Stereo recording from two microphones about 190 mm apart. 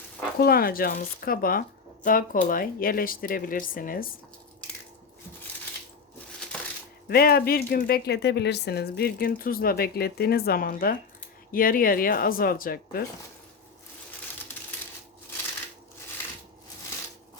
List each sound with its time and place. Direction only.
0.3 s speech: 55° left (ahead or behind)
7.1 s speech: 55° left (ahead or behind)